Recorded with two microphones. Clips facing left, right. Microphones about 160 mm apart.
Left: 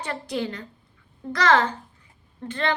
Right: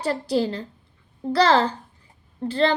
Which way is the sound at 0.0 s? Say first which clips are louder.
Right 6 dB; 35° right (ahead or behind).